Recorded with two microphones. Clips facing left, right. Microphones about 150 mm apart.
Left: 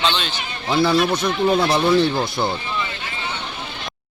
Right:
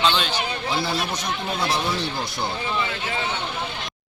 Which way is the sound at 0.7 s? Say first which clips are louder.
Left 11 dB; 60° left (ahead or behind).